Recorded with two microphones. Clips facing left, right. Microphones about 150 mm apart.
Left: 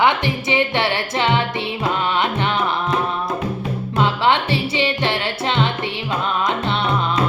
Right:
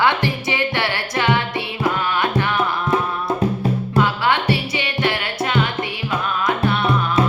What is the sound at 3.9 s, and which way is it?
Music, 25° left (ahead or behind).